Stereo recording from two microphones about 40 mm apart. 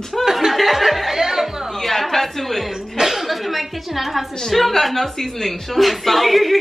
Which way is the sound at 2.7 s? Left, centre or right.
Centre.